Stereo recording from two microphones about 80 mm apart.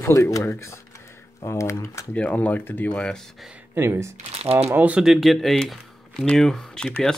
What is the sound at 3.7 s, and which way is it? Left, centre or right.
Speech, right.